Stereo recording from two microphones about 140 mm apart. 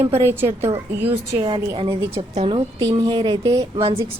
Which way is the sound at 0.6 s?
15° right (ahead or behind).